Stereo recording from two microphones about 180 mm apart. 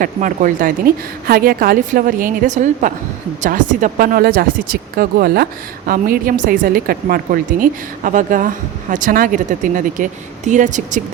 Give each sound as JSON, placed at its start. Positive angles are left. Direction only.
{"t": 0.0, "sound": "speech", "side_deg": -50}